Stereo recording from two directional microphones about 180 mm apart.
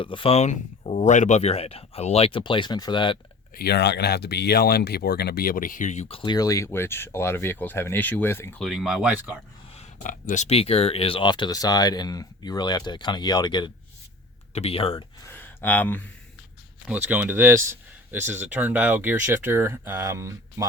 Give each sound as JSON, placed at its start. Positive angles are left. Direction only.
{"t": 0.0, "sound": "speech", "side_deg": 30}
{"t": 3.5, "sound": "speech", "side_deg": 60}
{"t": 8.6, "sound": "speech", "side_deg": 0}
{"t": 9.7, "sound": "speech", "side_deg": 45}
{"t": 15.2, "sound": "a sound", "side_deg": 10}
{"t": 16.9, "sound": "speech", "side_deg": -10}